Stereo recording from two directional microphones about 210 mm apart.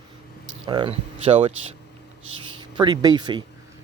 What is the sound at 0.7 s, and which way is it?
Speech, 25° right (ahead or behind).